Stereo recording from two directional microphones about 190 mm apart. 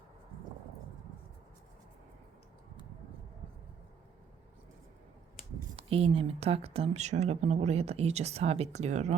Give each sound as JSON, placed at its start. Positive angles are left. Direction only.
{"t": 5.7, "sound": "speech", "side_deg": -30}